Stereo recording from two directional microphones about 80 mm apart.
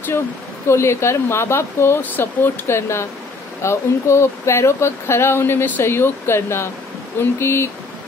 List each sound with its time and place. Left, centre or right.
0.7 s speech: left